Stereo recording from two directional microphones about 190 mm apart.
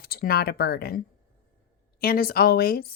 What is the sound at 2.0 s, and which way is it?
Speech, 50° left (ahead or behind).